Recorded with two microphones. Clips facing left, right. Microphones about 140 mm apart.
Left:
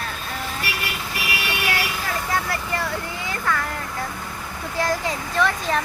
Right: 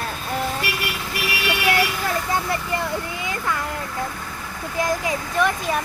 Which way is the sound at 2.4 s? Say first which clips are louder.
Right 2 dB; 20° right (ahead or behind).